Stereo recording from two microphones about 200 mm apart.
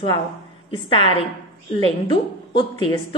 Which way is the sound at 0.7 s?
25° left (ahead or behind).